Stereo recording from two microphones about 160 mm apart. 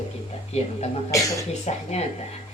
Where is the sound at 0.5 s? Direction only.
45° left (ahead or behind).